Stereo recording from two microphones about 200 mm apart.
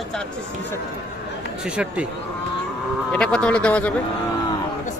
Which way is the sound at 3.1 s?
5° left (ahead or behind).